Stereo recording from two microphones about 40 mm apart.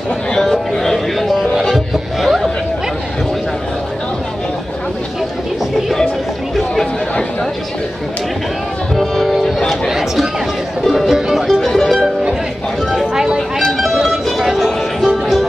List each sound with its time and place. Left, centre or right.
0.4 s music: centre
6.5 s chatter: centre
8.9 s music: centre
9.4 s music: centre
9.8 s chatter: centre
10.8 s music: centre
13.0 s music: centre